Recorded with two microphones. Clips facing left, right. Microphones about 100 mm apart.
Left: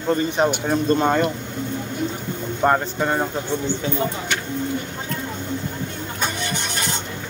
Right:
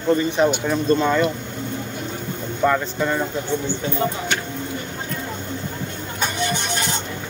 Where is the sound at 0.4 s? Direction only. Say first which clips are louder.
Right 1 dB; 50° left (ahead or behind).